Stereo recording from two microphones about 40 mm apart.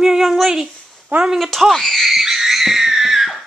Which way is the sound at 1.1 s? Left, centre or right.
Right.